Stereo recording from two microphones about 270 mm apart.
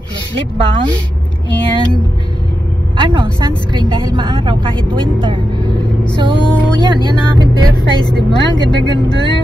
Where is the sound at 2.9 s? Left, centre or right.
Centre.